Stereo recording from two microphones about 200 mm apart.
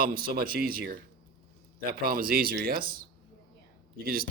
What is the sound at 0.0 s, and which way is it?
Speech, 45° right (ahead or behind).